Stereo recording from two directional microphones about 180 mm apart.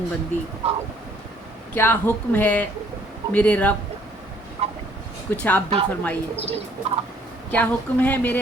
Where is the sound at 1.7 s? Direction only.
10° left (ahead or behind).